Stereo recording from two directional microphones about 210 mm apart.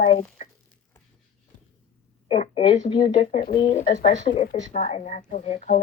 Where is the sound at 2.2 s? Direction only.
25° left (ahead or behind).